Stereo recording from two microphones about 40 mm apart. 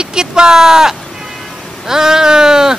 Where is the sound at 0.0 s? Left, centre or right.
Centre.